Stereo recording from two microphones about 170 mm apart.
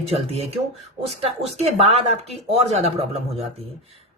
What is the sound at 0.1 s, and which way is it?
Speech, 35° right (ahead or behind).